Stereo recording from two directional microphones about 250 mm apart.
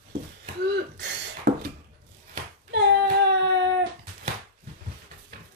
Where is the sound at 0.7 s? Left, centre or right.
Right.